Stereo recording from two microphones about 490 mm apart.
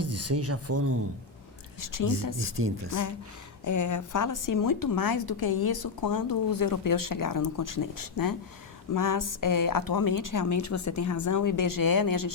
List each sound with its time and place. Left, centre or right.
0.0 s speech: right
1.8 s a woman's voice: left
2.5 s speech: right
3.6 s a woman's voice: left